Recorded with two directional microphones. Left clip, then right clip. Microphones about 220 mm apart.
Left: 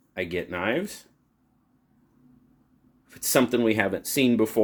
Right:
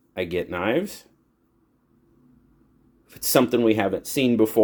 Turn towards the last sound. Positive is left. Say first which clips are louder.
# right 2 dB
turn(degrees=-5)  # may be behind; listen again after turning